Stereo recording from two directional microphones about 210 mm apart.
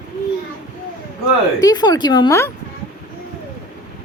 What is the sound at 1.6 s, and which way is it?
Speech, 20° left (ahead or behind).